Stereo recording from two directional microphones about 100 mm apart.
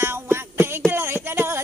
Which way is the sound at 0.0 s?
25° right (ahead or behind).